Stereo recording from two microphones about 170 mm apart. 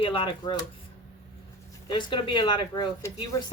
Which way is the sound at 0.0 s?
30° left (ahead or behind).